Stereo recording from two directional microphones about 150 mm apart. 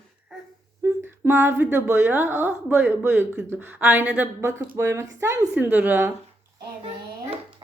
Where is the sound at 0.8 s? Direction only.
20° right (ahead or behind).